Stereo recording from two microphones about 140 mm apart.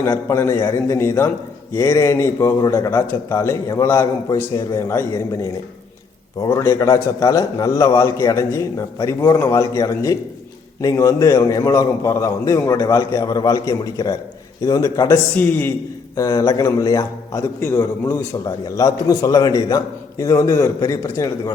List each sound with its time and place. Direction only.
0.0 s a man's voice: 20° left (ahead or behind)
16.1 s a man's voice: 25° left (ahead or behind)